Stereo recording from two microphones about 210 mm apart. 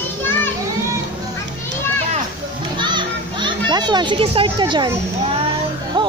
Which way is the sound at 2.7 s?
20° right (ahead or behind).